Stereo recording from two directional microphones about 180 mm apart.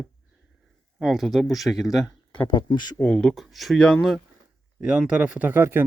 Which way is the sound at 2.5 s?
25° left (ahead or behind).